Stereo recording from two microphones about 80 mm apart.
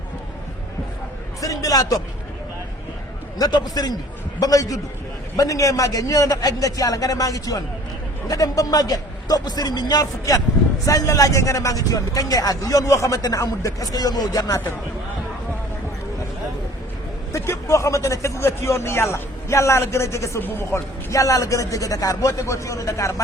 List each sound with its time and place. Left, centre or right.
1.4 s a sound: left
3.3 s a man's voice: left
17.3 s speech: left